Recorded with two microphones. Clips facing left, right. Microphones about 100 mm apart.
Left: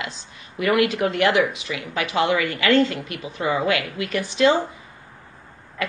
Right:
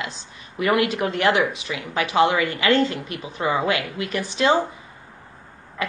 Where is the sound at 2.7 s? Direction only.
35° right (ahead or behind).